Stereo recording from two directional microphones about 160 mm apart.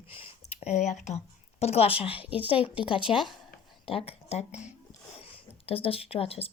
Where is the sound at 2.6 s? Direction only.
35° left (ahead or behind).